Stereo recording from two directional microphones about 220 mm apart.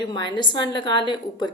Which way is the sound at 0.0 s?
20° left (ahead or behind).